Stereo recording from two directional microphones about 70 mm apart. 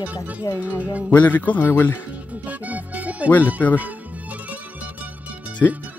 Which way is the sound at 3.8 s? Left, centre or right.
Right.